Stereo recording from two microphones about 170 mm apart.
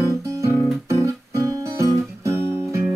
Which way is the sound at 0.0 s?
15° right (ahead or behind).